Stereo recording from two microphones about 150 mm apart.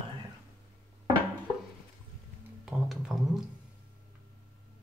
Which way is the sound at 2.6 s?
Centre (ahead or behind).